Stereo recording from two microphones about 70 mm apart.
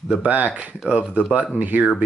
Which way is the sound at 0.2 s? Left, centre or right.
Right.